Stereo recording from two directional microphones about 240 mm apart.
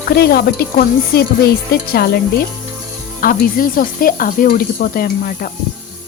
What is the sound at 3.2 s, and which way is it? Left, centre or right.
Speech, left.